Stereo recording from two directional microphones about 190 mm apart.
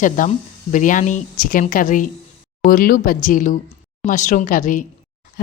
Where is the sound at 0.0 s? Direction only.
40° left (ahead or behind).